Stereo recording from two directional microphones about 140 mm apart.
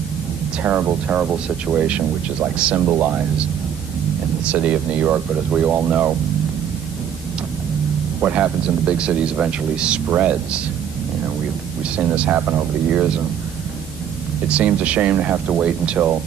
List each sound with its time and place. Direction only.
0.7 s speech: 10° right (ahead or behind)
4.5 s speech: 10° right (ahead or behind)
8.2 s speech: 10° right (ahead or behind)
12.0 s speech: 10° right (ahead or behind)
14.5 s speech: 10° right (ahead or behind)